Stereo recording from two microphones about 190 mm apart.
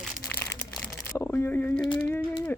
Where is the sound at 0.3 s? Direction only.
10° left (ahead or behind).